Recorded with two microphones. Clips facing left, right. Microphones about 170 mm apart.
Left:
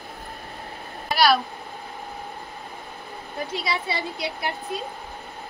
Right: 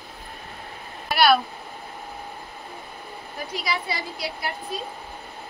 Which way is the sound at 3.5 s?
25° left (ahead or behind).